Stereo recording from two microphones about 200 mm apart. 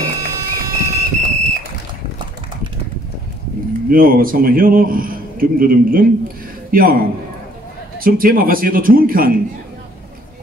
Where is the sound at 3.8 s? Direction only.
45° right (ahead or behind).